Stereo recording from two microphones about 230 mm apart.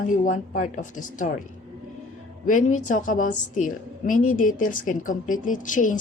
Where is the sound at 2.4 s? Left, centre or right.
Left.